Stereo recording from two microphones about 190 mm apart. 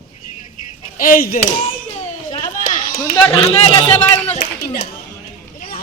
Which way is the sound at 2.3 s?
40° left (ahead or behind).